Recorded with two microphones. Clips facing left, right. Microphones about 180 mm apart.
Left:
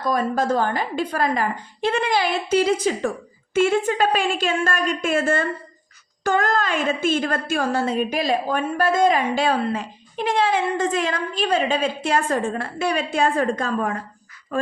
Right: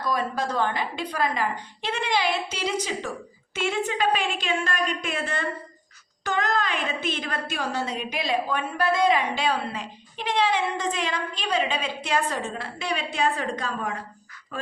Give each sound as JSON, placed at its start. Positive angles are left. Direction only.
{"t": 0.0, "sound": "a woman's voice", "side_deg": 45}